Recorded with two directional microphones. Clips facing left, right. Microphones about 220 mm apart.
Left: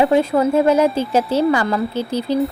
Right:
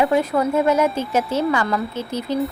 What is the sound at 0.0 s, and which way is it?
A woman's voice, 30° left (ahead or behind).